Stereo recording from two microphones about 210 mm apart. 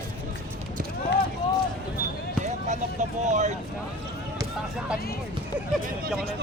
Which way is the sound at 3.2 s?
35° right (ahead or behind).